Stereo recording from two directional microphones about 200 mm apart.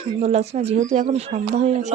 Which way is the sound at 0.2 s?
35° right (ahead or behind).